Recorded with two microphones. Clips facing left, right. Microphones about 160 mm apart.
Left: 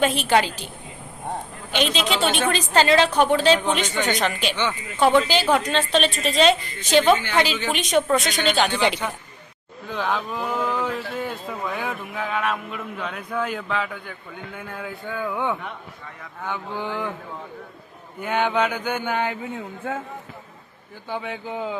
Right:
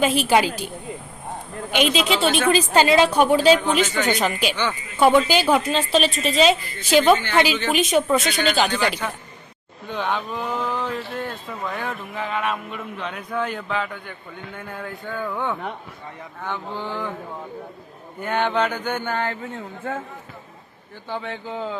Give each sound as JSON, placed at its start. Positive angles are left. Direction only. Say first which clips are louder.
{"t": 0.0, "sound": "a woman's voice", "louder": "right 1 dB", "side_deg": -5}
{"t": 1.7, "sound": "a woman's voice", "louder": "right 3 dB", "side_deg": -10}
{"t": 8.7, "sound": "a man's voice", "louder": "left 1 dB", "side_deg": 15}
{"t": 9.9, "sound": "a man's voice", "louder": "even", "side_deg": 0}
{"t": 18.2, "sound": "a man's voice", "louder": "even", "side_deg": 10}
{"t": 21.1, "sound": "a man's voice", "louder": "even", "side_deg": 10}